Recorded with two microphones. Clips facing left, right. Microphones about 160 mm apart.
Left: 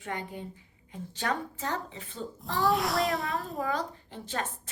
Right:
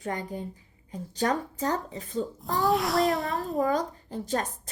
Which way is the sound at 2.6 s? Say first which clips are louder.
Right 2 dB; centre (ahead or behind).